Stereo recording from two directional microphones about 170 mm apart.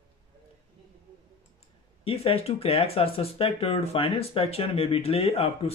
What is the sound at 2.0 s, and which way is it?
Speech, 35° left (ahead or behind).